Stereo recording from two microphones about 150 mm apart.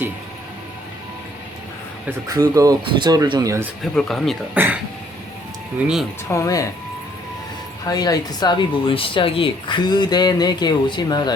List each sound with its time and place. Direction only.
2.2 s speech: 20° right (ahead or behind)
3.9 s speech: centre (ahead or behind)
4.5 s speech: 15° right (ahead or behind)
6.3 s speech: 20° left (ahead or behind)
7.9 s speech: 25° left (ahead or behind)